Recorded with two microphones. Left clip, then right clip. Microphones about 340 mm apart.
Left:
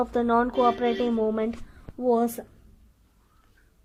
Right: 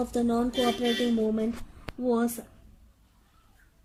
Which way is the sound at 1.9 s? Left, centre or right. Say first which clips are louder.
Right 1 dB; right.